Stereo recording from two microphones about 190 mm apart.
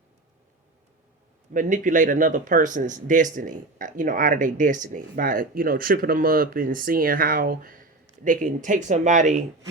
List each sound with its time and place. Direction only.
1.5 s speech: 45° right (ahead or behind)